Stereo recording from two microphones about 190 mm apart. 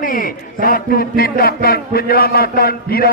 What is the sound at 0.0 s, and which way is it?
A man's voice, 50° left (ahead or behind).